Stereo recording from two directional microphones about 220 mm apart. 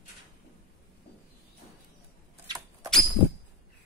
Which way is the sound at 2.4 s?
15° right (ahead or behind).